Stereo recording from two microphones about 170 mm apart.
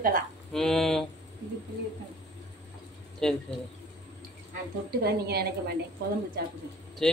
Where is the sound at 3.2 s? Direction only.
5° left (ahead or behind).